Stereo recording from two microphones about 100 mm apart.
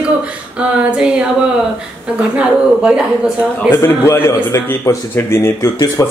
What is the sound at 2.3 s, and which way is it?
Speech, 10° right (ahead or behind).